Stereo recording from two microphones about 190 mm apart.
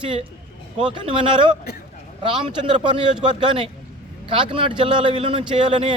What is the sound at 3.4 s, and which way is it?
A man's voice, 25° right (ahead or behind).